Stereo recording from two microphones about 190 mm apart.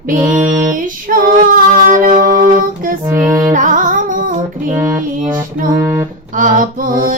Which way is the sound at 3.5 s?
45° right (ahead or behind).